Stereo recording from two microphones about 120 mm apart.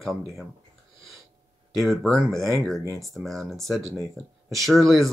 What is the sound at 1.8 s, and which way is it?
Speech, centre (ahead or behind).